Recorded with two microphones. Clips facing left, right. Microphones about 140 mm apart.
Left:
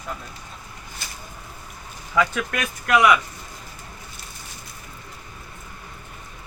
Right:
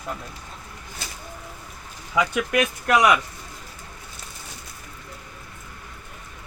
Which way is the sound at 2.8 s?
35° right (ahead or behind).